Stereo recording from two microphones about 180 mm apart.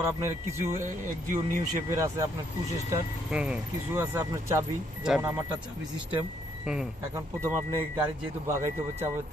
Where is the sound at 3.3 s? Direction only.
5° right (ahead or behind).